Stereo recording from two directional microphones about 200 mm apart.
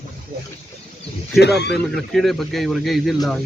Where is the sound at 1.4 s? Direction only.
55° left (ahead or behind).